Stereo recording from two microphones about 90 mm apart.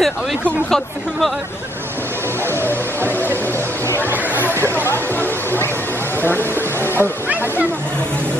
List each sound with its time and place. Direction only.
0.0 s speech: 5° left (ahead or behind)
2.4 s music: 25° right (ahead or behind)
4.6 s a sound: 25° left (ahead or behind)